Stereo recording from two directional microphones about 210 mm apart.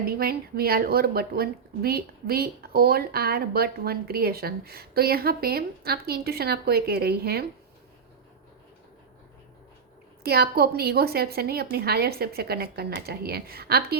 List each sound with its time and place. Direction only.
0.0 s a woman's voice: 45° right (ahead or behind)
10.2 s a woman's voice: 50° right (ahead or behind)